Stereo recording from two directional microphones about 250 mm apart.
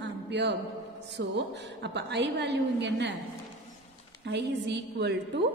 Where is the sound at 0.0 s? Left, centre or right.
Right.